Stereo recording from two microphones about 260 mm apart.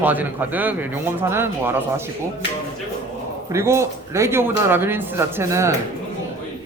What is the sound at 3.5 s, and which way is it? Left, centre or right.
Speech, centre.